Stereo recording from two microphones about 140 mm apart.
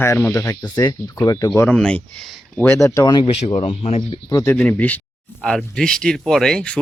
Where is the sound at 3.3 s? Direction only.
40° left (ahead or behind).